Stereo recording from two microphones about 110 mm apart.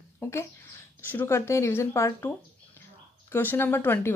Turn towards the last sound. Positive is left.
turn(degrees=20)  # may be behind; listen again after turning